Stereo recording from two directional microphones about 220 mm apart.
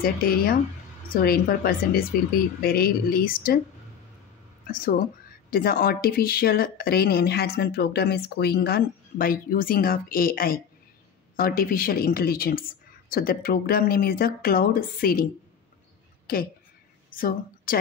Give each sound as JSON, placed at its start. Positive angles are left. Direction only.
{"t": 0.0, "sound": "speech", "side_deg": 40}
{"t": 4.6, "sound": "speech", "side_deg": 40}
{"t": 16.3, "sound": "a woman's voice", "side_deg": 40}